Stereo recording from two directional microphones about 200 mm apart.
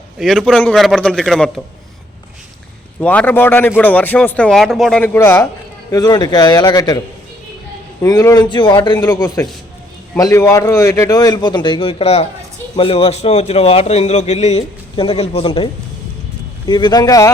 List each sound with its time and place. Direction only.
0.2 s a man's voice: centre (ahead or behind)
3.0 s a man's voice: 5° left (ahead or behind)
8.0 s a man's voice: 15° left (ahead or behind)